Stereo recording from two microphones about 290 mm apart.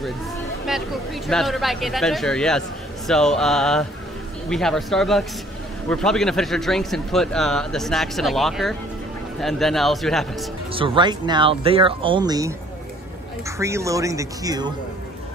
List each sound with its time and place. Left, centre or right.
0.7 s speech: centre
10.7 s speech: centre
13.6 s speech: centre